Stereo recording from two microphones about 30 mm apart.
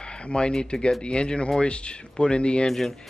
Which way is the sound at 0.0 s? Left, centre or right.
Left.